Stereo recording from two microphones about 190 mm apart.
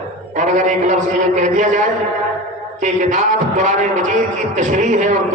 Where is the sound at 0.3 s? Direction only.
40° right (ahead or behind).